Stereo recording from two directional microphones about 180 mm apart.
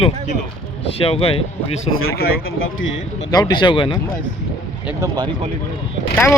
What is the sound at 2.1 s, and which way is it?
Speech, 75° left (ahead or behind).